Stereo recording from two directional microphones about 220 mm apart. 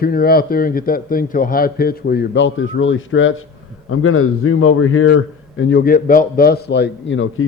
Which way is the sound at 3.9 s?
75° left (ahead or behind).